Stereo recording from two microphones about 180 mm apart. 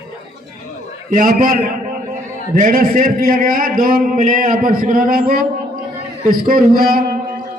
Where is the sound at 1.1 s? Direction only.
50° right (ahead or behind).